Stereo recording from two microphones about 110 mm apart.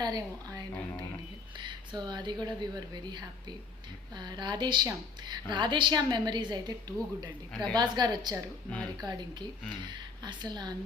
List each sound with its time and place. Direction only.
0.0 s a woman's voice: 35° right (ahead or behind)